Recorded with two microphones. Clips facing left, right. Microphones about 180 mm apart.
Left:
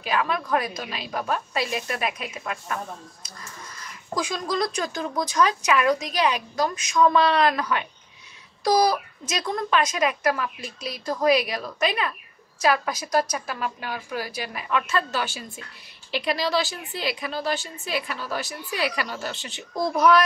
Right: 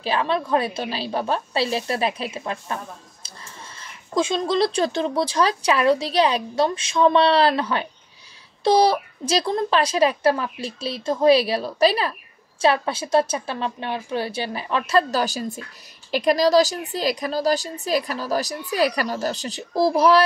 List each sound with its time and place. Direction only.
0.0 s a woman's voice: 30° right (ahead or behind)